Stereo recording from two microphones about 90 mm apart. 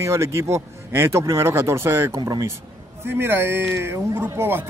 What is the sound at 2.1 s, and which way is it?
Speech, 40° right (ahead or behind).